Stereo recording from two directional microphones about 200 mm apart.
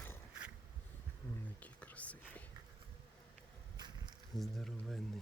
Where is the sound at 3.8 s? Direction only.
20° right (ahead or behind).